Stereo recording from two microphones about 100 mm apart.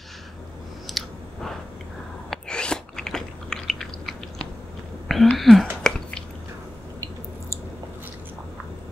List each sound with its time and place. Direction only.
0.8 s clicking: centre (ahead or behind)
2.3 s chewing: 10° left (ahead or behind)
5.0 s whispering: centre (ahead or behind)
5.4 s speech: centre (ahead or behind)
5.9 s drip: 5° left (ahead or behind)